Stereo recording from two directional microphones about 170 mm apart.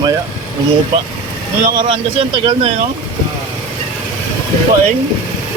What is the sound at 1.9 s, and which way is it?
Speech, 25° right (ahead or behind).